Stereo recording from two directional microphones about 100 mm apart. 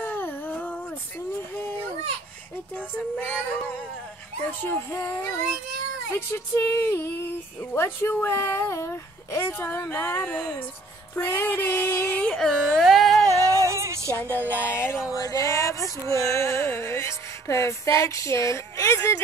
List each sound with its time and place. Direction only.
0.0 s a sound: 20° left (ahead or behind)
2.7 s female singing: 15° left (ahead or behind)
4.5 s speech: 20° left (ahead or behind)
12.2 s a sound: 10° left (ahead or behind)
13.2 s music: 30° right (ahead or behind)
14.8 s speech: 25° left (ahead or behind)
15.1 s music: 35° left (ahead or behind)